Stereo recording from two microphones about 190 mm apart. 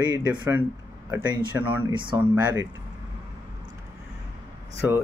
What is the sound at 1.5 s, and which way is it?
Speech, 10° right (ahead or behind).